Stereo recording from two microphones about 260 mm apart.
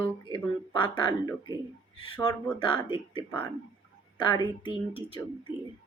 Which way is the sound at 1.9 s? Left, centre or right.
Centre.